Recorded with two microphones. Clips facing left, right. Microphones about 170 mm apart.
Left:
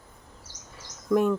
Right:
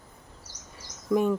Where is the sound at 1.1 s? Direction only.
5° right (ahead or behind).